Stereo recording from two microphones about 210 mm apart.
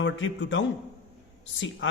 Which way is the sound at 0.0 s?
65° left (ahead or behind).